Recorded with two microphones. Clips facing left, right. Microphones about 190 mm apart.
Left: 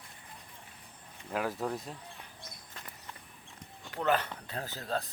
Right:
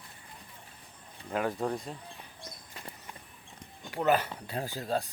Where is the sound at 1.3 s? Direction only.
Centre (ahead or behind).